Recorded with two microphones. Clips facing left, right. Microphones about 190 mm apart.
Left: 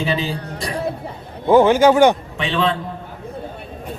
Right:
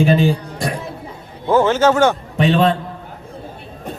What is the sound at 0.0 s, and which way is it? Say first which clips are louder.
Speech: right 7 dB; 50° right (ahead or behind).